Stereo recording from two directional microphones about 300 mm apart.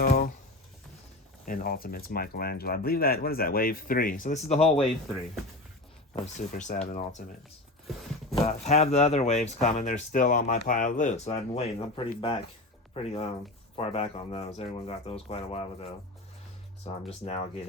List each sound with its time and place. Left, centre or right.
0.0 s a sound: left
1.5 s speech: left
6.1 s speech: left
8.4 s speech: left
17.1 s speech: left